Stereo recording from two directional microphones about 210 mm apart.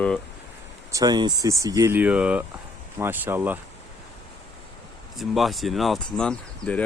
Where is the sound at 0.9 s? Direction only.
15° right (ahead or behind).